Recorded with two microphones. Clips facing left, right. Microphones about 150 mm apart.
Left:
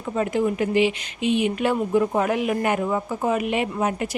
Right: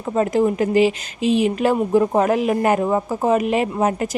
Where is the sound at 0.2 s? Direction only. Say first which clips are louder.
Right 5 dB; 40° right (ahead or behind).